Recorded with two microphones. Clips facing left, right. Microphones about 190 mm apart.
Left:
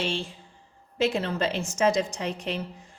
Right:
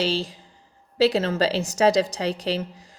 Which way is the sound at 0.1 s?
35° right (ahead or behind).